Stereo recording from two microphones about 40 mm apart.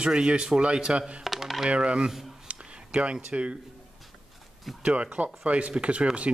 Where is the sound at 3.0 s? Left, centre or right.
Right.